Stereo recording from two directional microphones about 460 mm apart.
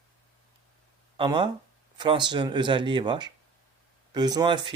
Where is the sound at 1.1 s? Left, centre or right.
Centre.